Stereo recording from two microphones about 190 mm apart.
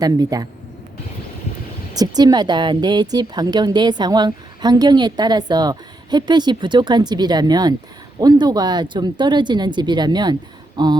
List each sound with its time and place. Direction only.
0.0 s speech: 20° right (ahead or behind)
1.9 s speech: 20° right (ahead or behind)